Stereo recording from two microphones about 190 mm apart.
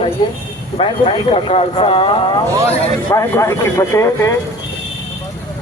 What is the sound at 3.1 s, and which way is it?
Speech, 15° left (ahead or behind).